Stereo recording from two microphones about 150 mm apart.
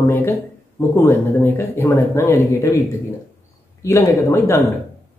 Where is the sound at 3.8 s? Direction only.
20° left (ahead or behind).